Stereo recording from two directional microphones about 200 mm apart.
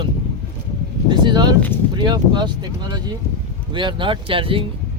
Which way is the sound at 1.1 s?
20° right (ahead or behind).